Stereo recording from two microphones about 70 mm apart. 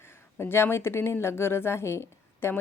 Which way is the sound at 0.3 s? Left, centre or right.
Left.